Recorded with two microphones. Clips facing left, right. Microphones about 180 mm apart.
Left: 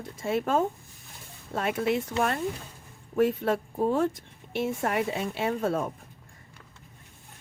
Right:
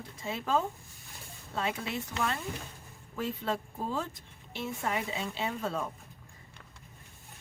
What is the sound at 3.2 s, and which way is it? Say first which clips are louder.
Speech: left 9 dB; 55° left (ahead or behind).